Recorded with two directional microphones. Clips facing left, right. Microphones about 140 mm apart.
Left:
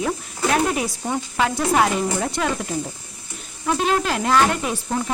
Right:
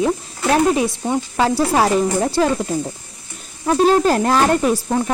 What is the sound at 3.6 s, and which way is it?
Speech, 35° right (ahead or behind).